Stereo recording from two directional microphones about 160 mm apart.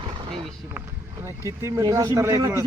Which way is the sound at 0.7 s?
15° right (ahead or behind).